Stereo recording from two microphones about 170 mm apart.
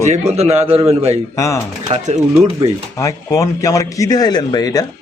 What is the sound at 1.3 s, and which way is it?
Mantra, 15° left (ahead or behind).